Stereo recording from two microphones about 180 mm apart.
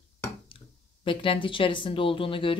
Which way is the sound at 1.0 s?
30° left (ahead or behind).